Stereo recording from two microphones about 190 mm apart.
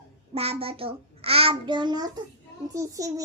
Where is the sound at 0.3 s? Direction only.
30° right (ahead or behind).